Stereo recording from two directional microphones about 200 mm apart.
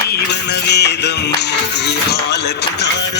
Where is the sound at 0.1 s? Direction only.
55° left (ahead or behind).